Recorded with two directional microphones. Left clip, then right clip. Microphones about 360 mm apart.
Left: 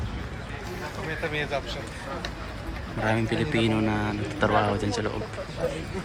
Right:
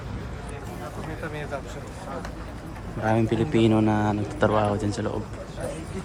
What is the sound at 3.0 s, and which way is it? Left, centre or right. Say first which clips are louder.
A man's voice: right 3 dB; centre.